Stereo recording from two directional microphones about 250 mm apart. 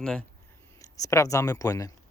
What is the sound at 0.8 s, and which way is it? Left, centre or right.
Speech, centre.